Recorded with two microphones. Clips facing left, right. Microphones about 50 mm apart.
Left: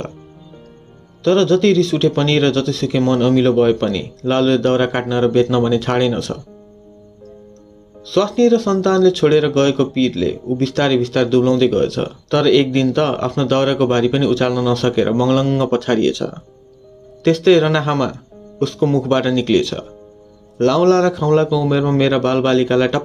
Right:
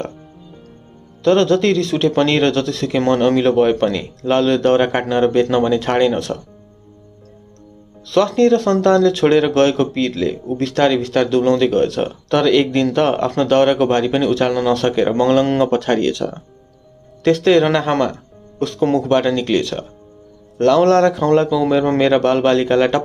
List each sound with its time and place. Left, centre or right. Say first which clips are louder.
1.2 s speech: left 1 dB; right
8.0 s speech: even; centre